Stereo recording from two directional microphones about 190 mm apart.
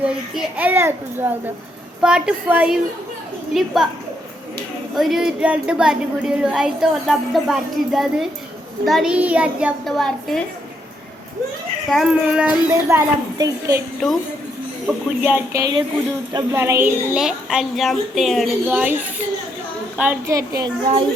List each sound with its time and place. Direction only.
0.0 s a child's voice: 5° right (ahead or behind)
4.9 s a woman's voice: centre (ahead or behind)
11.9 s a woman's voice: 5° right (ahead or behind)
14.8 s a child's voice: 10° right (ahead or behind)